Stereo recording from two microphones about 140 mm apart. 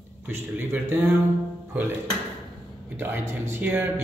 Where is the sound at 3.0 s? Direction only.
15° right (ahead or behind).